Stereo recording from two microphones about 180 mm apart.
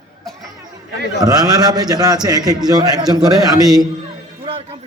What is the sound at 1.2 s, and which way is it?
A man's voice, 20° right (ahead or behind).